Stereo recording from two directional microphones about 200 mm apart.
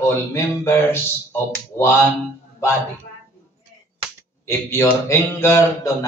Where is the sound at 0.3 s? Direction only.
10° left (ahead or behind).